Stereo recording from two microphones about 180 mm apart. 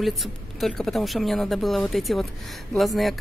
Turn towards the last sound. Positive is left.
turn(degrees=0)  # may be behind; listen again after turning